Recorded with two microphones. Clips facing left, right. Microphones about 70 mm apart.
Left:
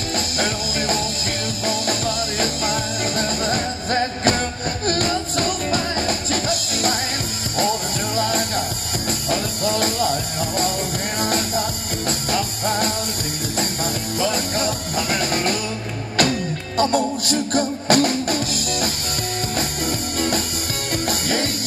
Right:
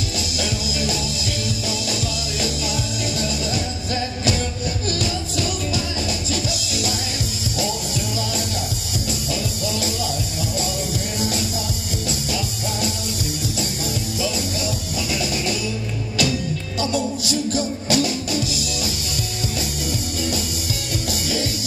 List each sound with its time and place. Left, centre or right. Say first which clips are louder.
0.4 s music: left 1 dB; left
2.4 s music: left 1 dB; left
8.2 s music: left 4 dB; left
11.1 s music: left 5 dB; left
14.2 s music: left 5 dB; left
19.9 s music: left 3 dB; left